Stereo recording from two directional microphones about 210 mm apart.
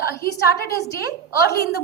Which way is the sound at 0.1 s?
45° left (ahead or behind).